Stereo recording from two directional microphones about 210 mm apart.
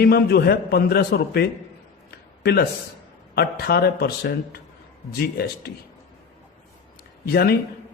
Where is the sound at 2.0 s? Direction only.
50° left (ahead or behind).